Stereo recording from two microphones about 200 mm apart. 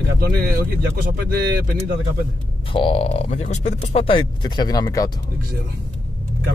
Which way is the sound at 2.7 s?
25° left (ahead or behind).